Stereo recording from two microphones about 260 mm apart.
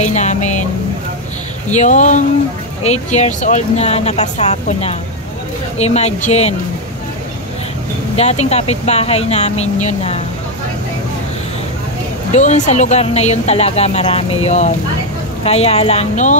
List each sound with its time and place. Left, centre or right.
0.0 s a sound: left
1.7 s speech: left
8.2 s speech: left
12.4 s speech: left